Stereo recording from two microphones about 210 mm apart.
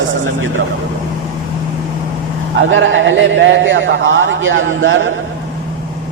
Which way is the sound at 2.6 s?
65° right (ahead or behind).